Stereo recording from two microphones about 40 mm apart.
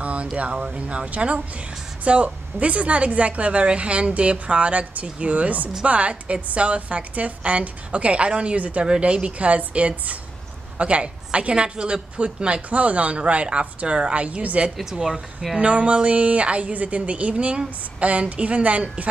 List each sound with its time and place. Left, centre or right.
0.0 s a sound: right
0.4 s a woman's voice: right
8.8 s a woman's voice: right
12.6 s a woman's voice: right
14.9 s a woman's voice: centre
15.6 s a woman's voice: right